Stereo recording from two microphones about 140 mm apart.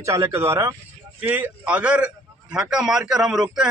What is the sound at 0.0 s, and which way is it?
A man's voice, 20° right (ahead or behind).